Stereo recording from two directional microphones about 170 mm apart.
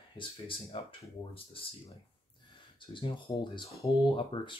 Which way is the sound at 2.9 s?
30° left (ahead or behind).